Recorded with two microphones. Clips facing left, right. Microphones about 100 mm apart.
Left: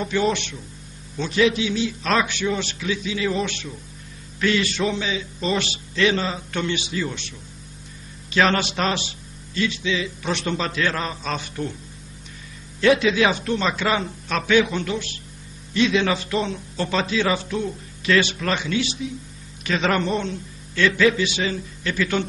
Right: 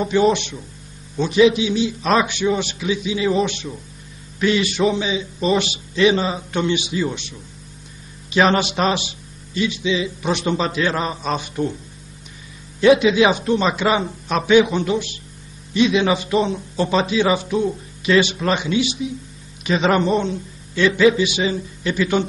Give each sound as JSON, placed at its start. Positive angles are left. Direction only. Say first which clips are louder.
{"t": 0.0, "sound": "a man's voice", "louder": "right 5 dB", "side_deg": -20}
{"t": 12.8, "sound": "a man's voice", "louder": "right 4 dB", "side_deg": -20}